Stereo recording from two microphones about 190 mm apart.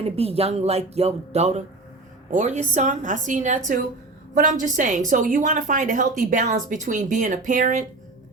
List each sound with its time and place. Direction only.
0.0 s a woman's voice: 30° right (ahead or behind)